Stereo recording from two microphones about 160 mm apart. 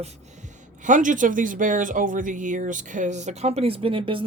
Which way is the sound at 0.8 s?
55° right (ahead or behind).